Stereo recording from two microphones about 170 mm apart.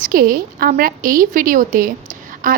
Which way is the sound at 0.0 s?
55° right (ahead or behind).